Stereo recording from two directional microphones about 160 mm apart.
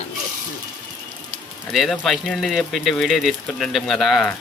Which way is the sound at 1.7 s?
Centre (ahead or behind).